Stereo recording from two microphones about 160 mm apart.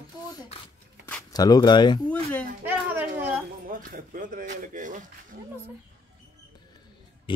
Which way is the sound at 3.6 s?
60° right (ahead or behind).